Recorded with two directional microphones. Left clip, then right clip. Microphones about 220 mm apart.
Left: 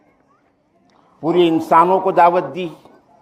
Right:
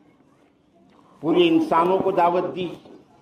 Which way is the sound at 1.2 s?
45° left (ahead or behind).